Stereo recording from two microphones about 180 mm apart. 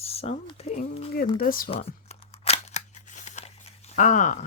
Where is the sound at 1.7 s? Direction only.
35° left (ahead or behind).